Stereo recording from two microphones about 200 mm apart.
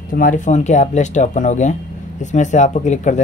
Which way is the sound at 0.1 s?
40° left (ahead or behind).